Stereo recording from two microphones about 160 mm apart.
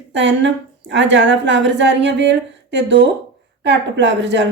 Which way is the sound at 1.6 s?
90° right.